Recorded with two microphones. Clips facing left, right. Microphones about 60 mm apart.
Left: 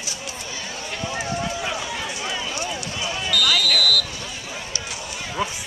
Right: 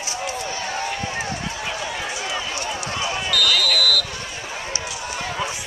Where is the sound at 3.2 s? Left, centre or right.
Centre.